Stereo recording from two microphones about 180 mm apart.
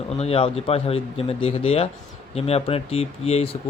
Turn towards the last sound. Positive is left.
turn(degrees=35)  # may be behind; listen again after turning